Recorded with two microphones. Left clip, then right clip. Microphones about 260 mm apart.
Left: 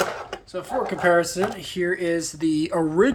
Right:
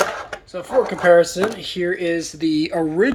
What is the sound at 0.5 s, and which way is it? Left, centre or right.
Speech, centre.